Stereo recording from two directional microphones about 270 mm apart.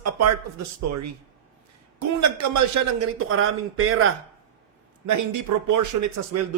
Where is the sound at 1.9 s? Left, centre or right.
Right.